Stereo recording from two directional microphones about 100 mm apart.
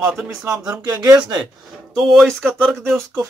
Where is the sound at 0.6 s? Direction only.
40° right (ahead or behind).